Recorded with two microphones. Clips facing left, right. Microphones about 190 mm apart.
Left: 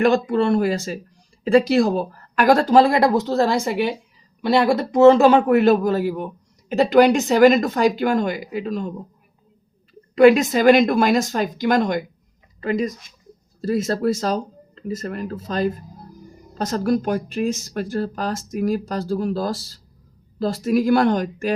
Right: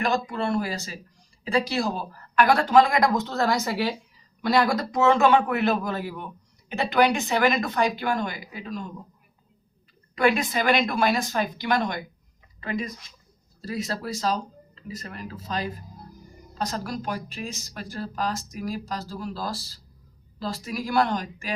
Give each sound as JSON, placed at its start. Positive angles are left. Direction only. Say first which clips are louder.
{"t": 0.3, "sound": "speech", "louder": "left 8 dB", "side_deg": 50}
{"t": 2.3, "sound": "speech", "louder": "left 4 dB", "side_deg": 40}
{"t": 10.3, "sound": "speech", "louder": "left 9 dB", "side_deg": 45}